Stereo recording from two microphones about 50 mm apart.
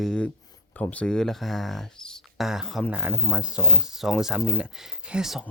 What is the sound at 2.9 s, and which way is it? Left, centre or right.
Speech, centre.